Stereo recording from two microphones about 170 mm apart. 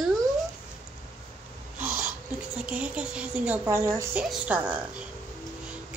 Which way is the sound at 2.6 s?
5° right (ahead or behind).